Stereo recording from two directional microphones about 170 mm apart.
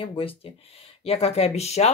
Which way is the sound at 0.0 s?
35° left (ahead or behind).